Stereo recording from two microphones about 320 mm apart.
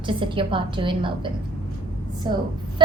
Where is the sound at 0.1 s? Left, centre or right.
Centre.